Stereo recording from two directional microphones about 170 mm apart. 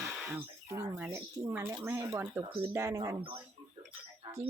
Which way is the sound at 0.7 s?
10° right (ahead or behind).